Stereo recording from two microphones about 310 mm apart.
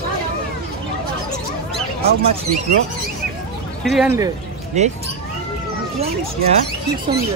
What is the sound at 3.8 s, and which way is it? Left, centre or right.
Speech, centre.